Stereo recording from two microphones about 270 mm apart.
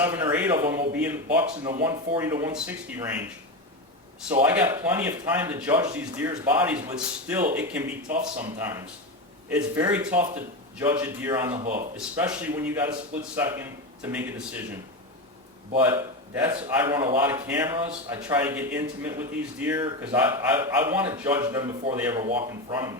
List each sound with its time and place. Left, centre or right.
0.0 s a man's voice: centre
11.5 s speech: right
11.9 s a man's voice: centre
15.8 s a man's voice: centre